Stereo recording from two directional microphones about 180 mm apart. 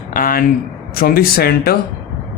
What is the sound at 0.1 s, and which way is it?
Speech, 50° left (ahead or behind).